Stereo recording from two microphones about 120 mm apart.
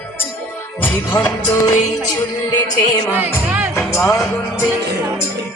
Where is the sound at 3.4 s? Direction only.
10° right (ahead or behind).